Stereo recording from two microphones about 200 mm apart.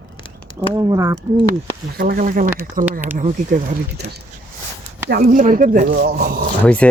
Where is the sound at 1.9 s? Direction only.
45° right (ahead or behind).